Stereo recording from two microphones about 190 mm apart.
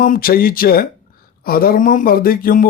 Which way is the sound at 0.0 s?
50° left (ahead or behind).